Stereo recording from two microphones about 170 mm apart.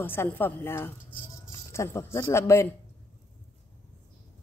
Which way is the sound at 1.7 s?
15° left (ahead or behind).